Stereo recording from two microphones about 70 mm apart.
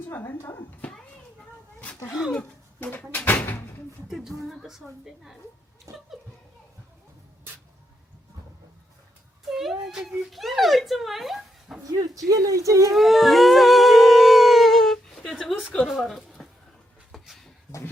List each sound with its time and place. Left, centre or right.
0.1 s speech: left
3.1 s speech: left
4.1 s speech: centre
9.5 s speech: centre
11.8 s speech: right
12.9 s humming: centre
15.8 s speech: centre
17.1 s a sound: centre